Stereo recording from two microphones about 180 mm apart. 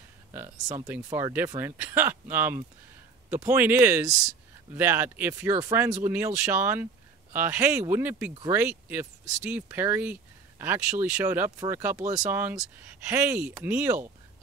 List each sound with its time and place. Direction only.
0.3 s speech: 15° right (ahead or behind)
12.0 s speech: 40° right (ahead or behind)
12.3 s speech: 10° right (ahead or behind)